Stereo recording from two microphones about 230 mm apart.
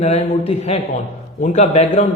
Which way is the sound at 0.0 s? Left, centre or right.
Left.